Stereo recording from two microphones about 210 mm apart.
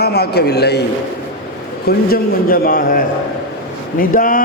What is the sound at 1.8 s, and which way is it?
A man's voice, 45° left (ahead or behind).